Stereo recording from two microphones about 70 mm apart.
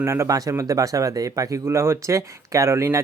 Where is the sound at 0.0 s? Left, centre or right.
Right.